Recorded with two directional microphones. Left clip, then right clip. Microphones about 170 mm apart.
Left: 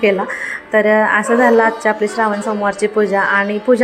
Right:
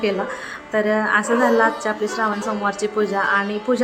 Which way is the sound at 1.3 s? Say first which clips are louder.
Left 5 dB; centre (ahead or behind).